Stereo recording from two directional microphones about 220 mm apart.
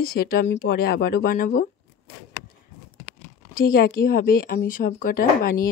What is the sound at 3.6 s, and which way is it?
A woman's voice, 40° left (ahead or behind).